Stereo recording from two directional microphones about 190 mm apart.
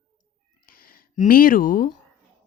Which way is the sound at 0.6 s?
50° left (ahead or behind).